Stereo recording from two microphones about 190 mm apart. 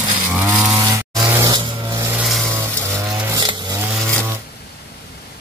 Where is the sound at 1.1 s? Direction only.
5° right (ahead or behind).